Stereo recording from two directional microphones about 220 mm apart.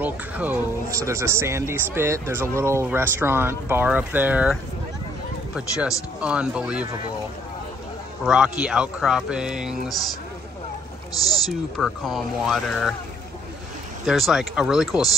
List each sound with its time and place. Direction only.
0.0 s speech: 5° right (ahead or behind)
8.3 s speech: 5° right (ahead or behind)
11.8 s speech: centre (ahead or behind)
14.0 s speech: centre (ahead or behind)